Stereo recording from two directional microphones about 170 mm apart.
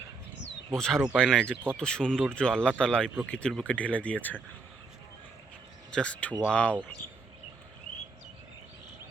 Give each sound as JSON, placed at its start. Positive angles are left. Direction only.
{"t": 0.8, "sound": "speech", "side_deg": 5}
{"t": 5.9, "sound": "speech", "side_deg": 5}